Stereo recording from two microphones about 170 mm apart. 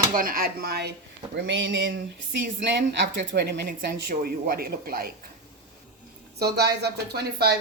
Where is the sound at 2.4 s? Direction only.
90° right; by 5.1 s 60° right (ahead or behind).